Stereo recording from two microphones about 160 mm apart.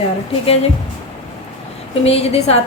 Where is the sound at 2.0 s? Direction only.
40° left (ahead or behind).